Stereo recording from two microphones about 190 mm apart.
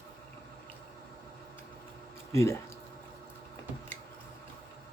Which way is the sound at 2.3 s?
15° left (ahead or behind).